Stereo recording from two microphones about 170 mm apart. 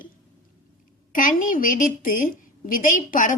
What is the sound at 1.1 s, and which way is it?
A woman's voice, 55° left (ahead or behind).